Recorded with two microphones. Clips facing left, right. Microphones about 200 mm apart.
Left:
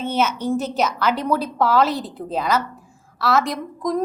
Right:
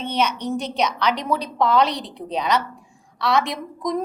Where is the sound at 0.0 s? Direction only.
5° left (ahead or behind).